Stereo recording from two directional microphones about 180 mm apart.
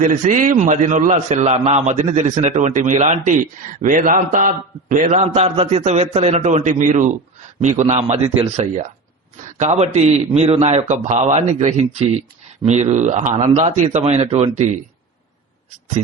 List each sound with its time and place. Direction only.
0.0 s a man's voice: 45° right (ahead or behind)